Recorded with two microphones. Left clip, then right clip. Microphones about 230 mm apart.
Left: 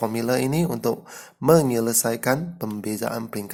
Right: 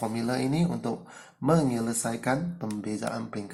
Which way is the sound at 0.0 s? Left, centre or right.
Left.